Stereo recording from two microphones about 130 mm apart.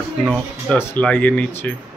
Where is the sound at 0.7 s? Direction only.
15° left (ahead or behind).